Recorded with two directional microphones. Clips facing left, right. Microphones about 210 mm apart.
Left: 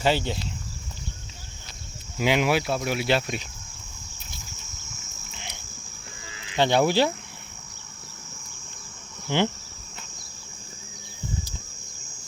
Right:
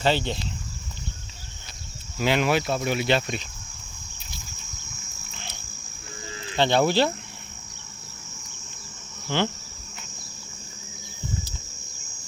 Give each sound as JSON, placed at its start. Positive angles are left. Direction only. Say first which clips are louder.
{"t": 0.0, "sound": "cricket", "louder": "even", "side_deg": 10}
{"t": 2.1, "sound": "cricket", "louder": "even", "side_deg": 15}
{"t": 6.5, "sound": "cricket", "louder": "even", "side_deg": 10}
{"t": 9.3, "sound": "cricket", "louder": "left 1 dB", "side_deg": 15}